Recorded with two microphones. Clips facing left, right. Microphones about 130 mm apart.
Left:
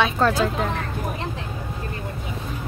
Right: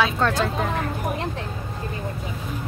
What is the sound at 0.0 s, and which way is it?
Speech, 5° left (ahead or behind).